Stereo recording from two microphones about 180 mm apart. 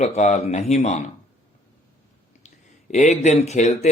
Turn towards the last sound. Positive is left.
turn(degrees=40)  # may be behind; listen again after turning